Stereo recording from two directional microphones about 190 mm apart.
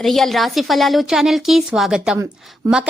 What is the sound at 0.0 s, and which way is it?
A woman's voice, centre (ahead or behind).